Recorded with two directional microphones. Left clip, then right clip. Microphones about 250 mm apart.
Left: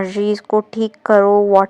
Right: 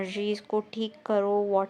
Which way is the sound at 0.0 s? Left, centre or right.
Left.